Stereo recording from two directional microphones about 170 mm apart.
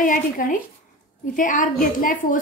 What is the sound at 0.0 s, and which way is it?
A woman's voice, 50° left (ahead or behind).